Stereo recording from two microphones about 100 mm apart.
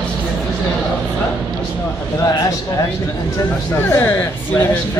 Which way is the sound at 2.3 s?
35° left (ahead or behind).